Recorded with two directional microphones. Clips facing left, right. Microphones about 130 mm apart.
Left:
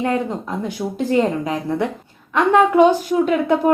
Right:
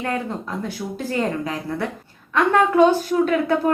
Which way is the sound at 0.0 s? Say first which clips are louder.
Left 5 dB; 20° left (ahead or behind).